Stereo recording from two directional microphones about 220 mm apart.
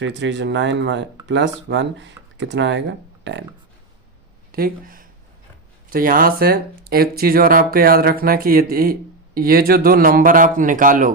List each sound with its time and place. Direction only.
0.0 s speech: 55° right (ahead or behind)
4.5 s speech: 40° right (ahead or behind)